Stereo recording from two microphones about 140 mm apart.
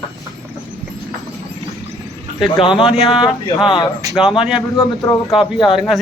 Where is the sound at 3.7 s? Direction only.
35° left (ahead or behind).